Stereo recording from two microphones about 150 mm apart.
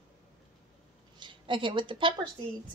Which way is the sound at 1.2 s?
35° right (ahead or behind).